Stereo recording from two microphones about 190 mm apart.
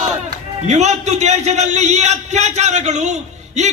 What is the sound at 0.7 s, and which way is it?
A man's voice, 35° right (ahead or behind).